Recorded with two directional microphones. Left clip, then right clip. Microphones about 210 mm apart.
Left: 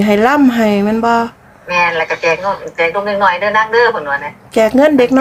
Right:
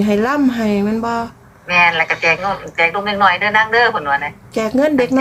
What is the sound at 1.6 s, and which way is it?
Speech, 35° right (ahead or behind).